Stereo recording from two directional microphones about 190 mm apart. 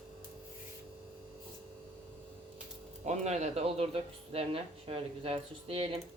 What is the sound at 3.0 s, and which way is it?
Speech, 35° right (ahead or behind).